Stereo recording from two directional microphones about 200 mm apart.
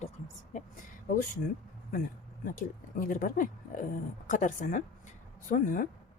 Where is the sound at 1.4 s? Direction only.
45° left (ahead or behind).